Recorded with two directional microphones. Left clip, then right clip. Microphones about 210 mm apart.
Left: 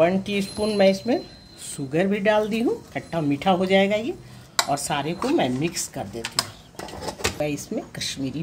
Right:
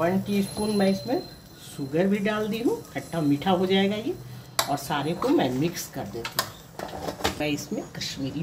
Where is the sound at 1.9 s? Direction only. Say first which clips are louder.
Left 4 dB; 35° left (ahead or behind).